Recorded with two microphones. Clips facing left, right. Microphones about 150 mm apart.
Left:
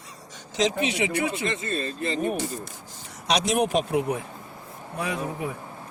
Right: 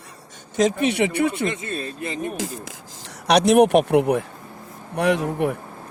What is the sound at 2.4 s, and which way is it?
Rub, 90° right.